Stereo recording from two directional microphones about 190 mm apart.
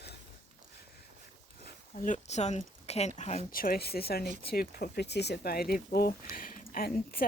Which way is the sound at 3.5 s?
50° left (ahead or behind).